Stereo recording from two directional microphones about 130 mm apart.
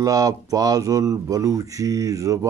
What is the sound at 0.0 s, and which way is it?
Speech, 25° right (ahead or behind).